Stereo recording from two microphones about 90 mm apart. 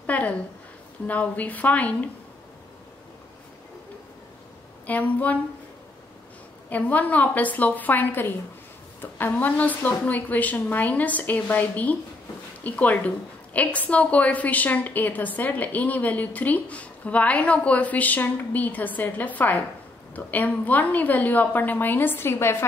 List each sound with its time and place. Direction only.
0.0 s a woman's voice: 15° left (ahead or behind)
4.8 s a woman's voice: 15° left (ahead or behind)
6.7 s a woman's voice: 15° left (ahead or behind)